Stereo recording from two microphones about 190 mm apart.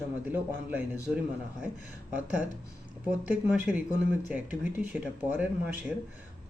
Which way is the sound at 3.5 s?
5° right (ahead or behind).